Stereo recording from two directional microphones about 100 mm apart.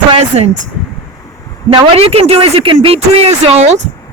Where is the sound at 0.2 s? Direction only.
90° right.